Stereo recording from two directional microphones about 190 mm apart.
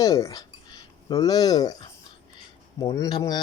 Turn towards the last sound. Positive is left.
turn(degrees=20)  # may be behind; listen again after turning